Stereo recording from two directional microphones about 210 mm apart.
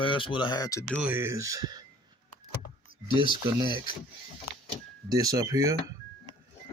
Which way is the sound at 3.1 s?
20° left (ahead or behind).